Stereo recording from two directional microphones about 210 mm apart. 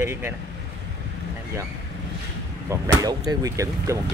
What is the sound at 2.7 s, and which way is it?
Speech, 15° right (ahead or behind).